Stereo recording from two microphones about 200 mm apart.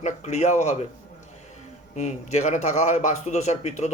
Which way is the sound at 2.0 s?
35° left (ahead or behind).